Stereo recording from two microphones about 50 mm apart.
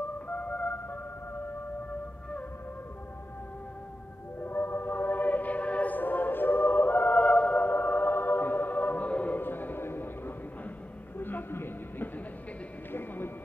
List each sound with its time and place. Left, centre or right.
0.3 s music: left
4.4 s music: left
7.6 s music: left
9.4 s music: left
11.1 s a sound: left